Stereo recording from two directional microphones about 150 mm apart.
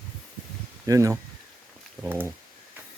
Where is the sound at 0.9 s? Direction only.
20° right (ahead or behind).